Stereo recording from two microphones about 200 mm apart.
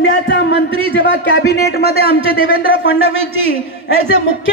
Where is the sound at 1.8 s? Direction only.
30° right (ahead or behind).